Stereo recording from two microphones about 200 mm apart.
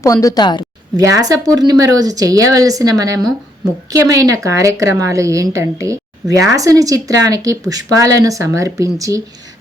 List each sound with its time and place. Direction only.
0.0 s a woman's voice: 15° left (ahead or behind)
0.9 s a woman's voice: 15° right (ahead or behind)